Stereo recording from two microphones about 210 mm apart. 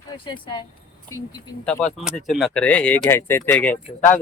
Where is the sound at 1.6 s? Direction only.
5° left (ahead or behind).